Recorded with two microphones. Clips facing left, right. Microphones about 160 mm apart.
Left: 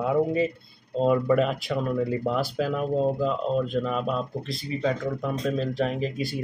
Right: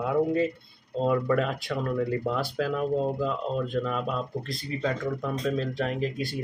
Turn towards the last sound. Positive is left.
turn(degrees=5)  # may be behind; listen again after turning